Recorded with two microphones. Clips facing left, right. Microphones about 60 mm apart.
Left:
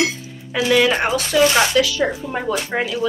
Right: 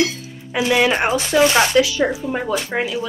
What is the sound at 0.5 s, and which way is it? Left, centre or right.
Speech, centre.